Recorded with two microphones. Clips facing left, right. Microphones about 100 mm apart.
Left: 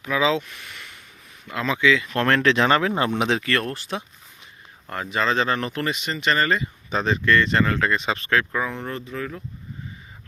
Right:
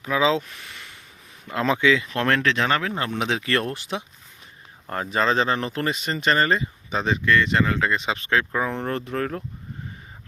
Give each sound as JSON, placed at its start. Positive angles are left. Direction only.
{"t": 0.0, "sound": "speech", "side_deg": -30}
{"t": 2.1, "sound": "speech", "side_deg": 0}
{"t": 3.4, "sound": "speech", "side_deg": -25}
{"t": 4.9, "sound": "speech", "side_deg": -35}
{"t": 6.9, "sound": "speech", "side_deg": -15}
{"t": 8.9, "sound": "speech", "side_deg": -55}